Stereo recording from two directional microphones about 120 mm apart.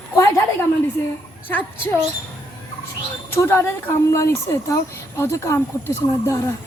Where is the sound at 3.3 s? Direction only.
20° left (ahead or behind).